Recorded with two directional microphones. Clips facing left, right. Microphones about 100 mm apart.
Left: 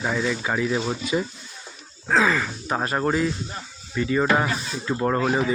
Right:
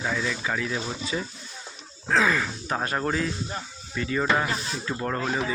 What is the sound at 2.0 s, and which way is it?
Speech, centre (ahead or behind).